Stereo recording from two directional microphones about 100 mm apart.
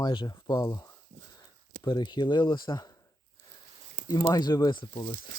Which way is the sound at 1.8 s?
50° left (ahead or behind).